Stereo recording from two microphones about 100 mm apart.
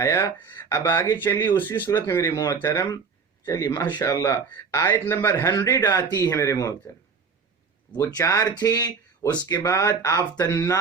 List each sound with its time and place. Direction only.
0.0 s speech: 30° left (ahead or behind)
2.3 s speech: 40° left (ahead or behind)
3.8 s speech: 50° left (ahead or behind)
4.0 s speech: 30° left (ahead or behind)
8.1 s speech: 35° left (ahead or behind)